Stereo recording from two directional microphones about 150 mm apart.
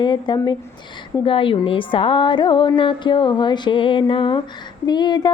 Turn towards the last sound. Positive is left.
turn(degrees=30)  # may be behind; listen again after turning